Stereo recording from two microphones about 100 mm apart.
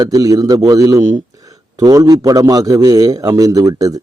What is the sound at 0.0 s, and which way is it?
A man's voice, 35° right (ahead or behind).